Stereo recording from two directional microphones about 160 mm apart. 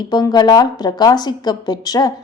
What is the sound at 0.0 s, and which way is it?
A woman's voice, 25° left (ahead or behind).